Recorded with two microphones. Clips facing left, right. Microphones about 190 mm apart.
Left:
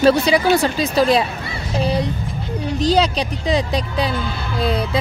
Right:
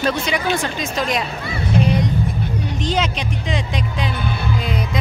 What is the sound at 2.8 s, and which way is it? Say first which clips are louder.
Speech: left 6 dB; 35° left (ahead or behind).